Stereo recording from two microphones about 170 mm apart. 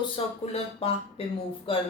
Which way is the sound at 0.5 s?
35° left (ahead or behind).